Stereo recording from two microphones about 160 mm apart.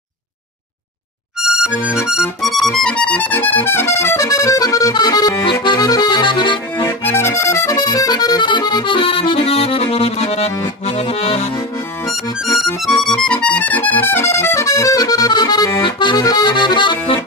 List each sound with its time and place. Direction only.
1.4 s music: 5° right (ahead or behind); by 5.3 s 25° left (ahead or behind)
5.5 s accordion: 30° left (ahead or behind)
6.8 s accordion: 15° left (ahead or behind); by 11.5 s 40° left (ahead or behind)
12.1 s music: centre (ahead or behind); by 17.2 s 30° left (ahead or behind)